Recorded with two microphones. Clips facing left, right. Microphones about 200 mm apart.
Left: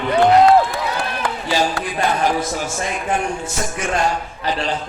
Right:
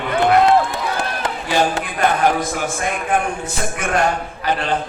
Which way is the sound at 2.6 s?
55° right (ahead or behind).